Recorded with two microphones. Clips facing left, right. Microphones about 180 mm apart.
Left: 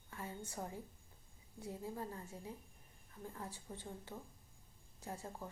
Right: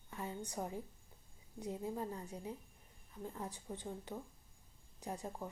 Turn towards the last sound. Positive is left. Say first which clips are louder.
# right 3 dB
turn(degrees=-15)  # may be behind; listen again after turning